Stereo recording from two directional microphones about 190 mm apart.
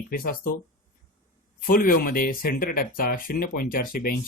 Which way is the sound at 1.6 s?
50° left (ahead or behind).